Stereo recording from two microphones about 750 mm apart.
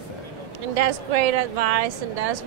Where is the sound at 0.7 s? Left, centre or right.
Right.